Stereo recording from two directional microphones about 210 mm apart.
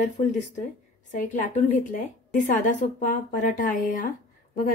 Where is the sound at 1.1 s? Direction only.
35° left (ahead or behind).